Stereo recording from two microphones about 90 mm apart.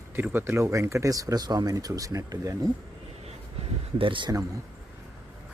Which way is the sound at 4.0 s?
65° right (ahead or behind).